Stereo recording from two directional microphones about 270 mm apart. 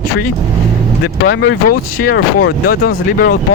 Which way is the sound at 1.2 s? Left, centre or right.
Left.